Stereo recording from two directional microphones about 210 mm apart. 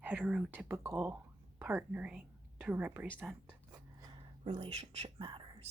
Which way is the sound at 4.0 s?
25° right (ahead or behind).